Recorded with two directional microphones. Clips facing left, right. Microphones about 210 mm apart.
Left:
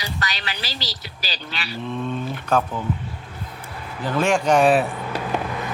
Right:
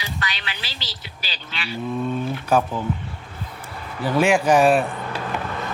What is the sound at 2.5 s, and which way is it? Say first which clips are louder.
Speech: right 1 dB; 10° right (ahead or behind).